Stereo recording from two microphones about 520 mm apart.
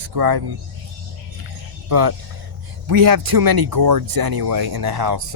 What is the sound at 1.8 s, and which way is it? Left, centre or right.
Speech, right.